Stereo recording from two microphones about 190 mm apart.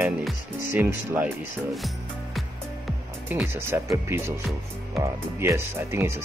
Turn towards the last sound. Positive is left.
turn(degrees=-15)  # may be behind; listen again after turning